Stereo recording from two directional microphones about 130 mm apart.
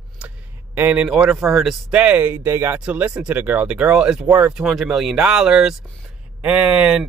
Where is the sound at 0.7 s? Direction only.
10° right (ahead or behind).